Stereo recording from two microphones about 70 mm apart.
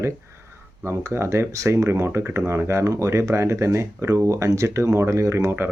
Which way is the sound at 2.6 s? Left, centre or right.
Right.